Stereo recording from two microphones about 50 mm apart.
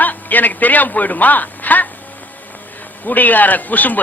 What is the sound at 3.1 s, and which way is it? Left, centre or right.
Speech, left.